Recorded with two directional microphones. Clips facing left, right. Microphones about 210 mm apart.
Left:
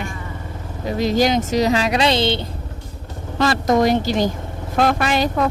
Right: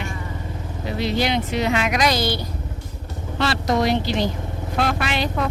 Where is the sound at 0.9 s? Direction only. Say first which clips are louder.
Left 5 dB; 45° left (ahead or behind); by 2.5 s 25° left (ahead or behind).